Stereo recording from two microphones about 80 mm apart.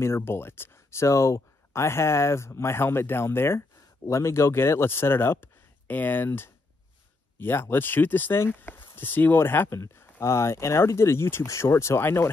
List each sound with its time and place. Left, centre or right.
0.0 s speech: left